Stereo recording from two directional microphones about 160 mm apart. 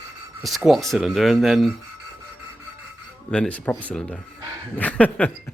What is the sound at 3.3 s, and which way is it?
Speech, 10° left (ahead or behind).